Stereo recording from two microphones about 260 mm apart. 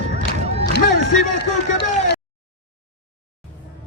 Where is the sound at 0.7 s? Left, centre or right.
Left.